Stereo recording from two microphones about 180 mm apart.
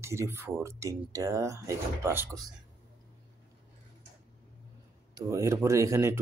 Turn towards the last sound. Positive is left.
turn(degrees=-15)  # may be behind; listen again after turning